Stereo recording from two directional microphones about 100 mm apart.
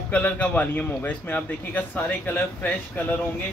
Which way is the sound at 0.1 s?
15° left (ahead or behind).